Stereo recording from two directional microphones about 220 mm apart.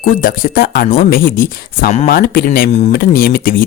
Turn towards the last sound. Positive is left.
turn(degrees=40)  # may be behind; listen again after turning